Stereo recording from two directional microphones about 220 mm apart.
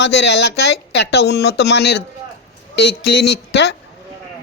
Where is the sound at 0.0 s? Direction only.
50° left (ahead or behind).